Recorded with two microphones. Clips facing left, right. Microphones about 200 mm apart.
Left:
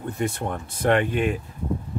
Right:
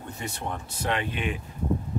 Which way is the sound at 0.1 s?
55° left (ahead or behind).